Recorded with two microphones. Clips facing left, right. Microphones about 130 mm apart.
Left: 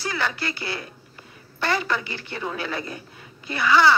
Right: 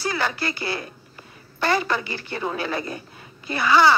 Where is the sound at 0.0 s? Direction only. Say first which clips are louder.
Right 2 dB; 40° right (ahead or behind).